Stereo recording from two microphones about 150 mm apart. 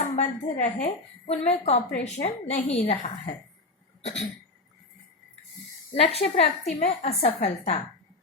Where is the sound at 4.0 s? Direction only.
45° left (ahead or behind).